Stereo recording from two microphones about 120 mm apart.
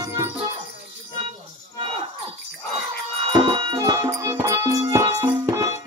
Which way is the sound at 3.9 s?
30° right (ahead or behind).